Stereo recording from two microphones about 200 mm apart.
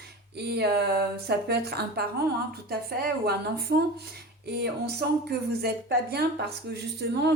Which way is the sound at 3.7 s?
45° right (ahead or behind).